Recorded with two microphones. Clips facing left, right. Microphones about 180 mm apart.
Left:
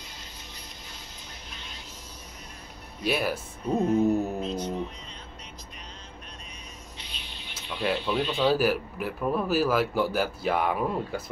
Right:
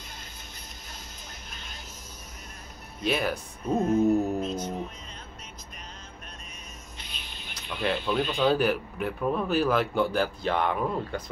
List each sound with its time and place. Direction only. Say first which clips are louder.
1.5 s a sound: left 1 dB; 45° right (ahead or behind)
3.0 s speech: even; 5° left (ahead or behind)
7.0 s music: even; 50° right (ahead or behind)
7.8 s speech: even; 5° left (ahead or behind)